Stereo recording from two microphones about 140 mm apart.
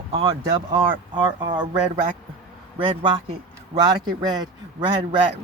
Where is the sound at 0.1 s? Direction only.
35° right (ahead or behind).